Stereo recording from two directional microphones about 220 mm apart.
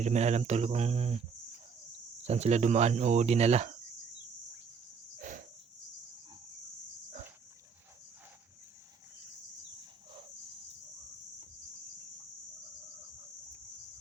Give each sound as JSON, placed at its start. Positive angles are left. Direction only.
{"t": 0.0, "sound": "speech", "side_deg": -30}
{"t": 2.2, "sound": "speech", "side_deg": -30}
{"t": 5.2, "sound": "cricket", "side_deg": -35}